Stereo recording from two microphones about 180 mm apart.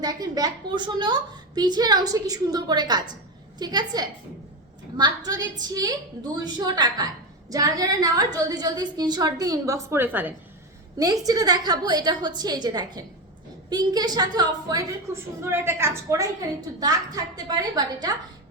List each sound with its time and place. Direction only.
0.0 s a woman's voice: 20° right (ahead or behind)